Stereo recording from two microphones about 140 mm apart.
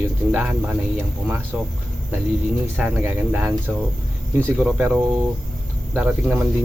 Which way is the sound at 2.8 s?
15° right (ahead or behind).